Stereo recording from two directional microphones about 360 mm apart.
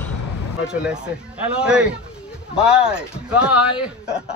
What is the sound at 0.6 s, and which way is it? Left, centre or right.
A man's voice, centre.